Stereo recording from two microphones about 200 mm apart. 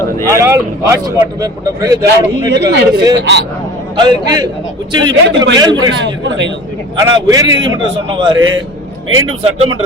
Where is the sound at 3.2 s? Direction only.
55° right (ahead or behind).